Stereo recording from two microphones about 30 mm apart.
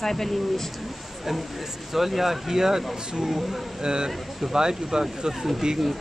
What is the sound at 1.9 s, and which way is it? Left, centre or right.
Speech, centre.